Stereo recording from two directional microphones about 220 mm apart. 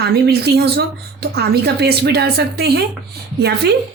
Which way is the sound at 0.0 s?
45° right (ahead or behind).